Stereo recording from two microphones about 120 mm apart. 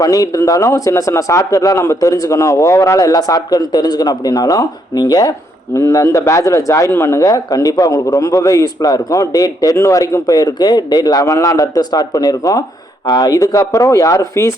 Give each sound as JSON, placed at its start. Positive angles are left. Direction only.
{"t": 0.0, "sound": "a man's voice", "side_deg": 30}